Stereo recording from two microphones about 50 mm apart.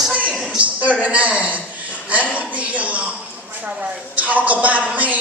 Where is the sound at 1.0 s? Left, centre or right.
Right.